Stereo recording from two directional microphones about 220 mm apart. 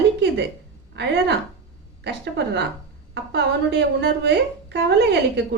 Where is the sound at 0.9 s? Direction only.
50° right (ahead or behind).